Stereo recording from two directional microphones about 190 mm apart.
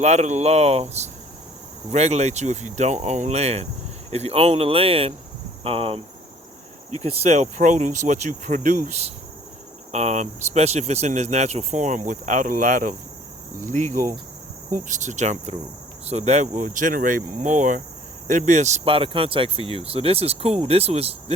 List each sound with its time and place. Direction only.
0.0 s speech: 35° right (ahead or behind)
7.0 s speech: 35° right (ahead or behind)
13.6 s cricket: 40° right (ahead or behind)
14.7 s speech: 40° right (ahead or behind)